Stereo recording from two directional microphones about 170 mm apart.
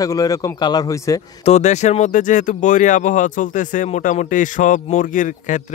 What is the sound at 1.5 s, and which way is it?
Speech, 40° left (ahead or behind).